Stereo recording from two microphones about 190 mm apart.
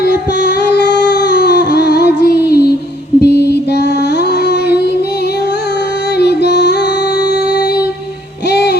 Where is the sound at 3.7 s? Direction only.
60° left (ahead or behind).